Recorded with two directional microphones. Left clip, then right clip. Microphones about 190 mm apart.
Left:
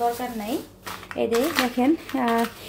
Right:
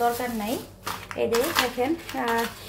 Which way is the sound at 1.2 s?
35° left (ahead or behind).